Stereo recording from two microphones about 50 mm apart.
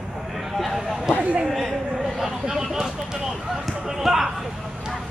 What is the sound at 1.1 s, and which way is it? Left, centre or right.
Speech, right.